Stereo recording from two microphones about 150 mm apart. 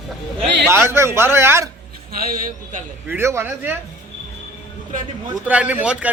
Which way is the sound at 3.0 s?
15° right (ahead or behind).